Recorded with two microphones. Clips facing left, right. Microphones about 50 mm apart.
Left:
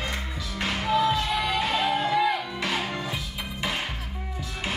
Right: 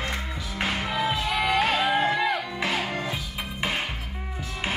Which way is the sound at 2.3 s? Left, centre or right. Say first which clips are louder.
Right 1 dB; centre.